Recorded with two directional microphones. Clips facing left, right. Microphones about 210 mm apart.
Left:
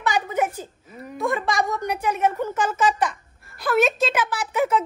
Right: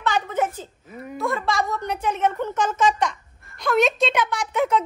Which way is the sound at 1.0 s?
Centre (ahead or behind).